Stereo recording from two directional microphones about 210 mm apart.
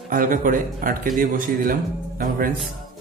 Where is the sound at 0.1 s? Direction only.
40° right (ahead or behind).